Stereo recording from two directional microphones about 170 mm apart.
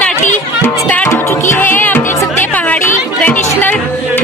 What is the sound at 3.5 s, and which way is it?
Music, 10° left (ahead or behind).